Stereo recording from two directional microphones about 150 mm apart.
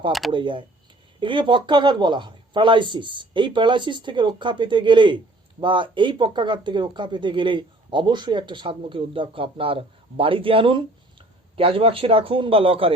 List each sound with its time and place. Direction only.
0.3 s speech: 30° right (ahead or behind)